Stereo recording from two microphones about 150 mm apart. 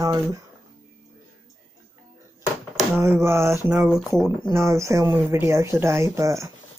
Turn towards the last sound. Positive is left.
turn(degrees=-20)  # may be behind; listen again after turning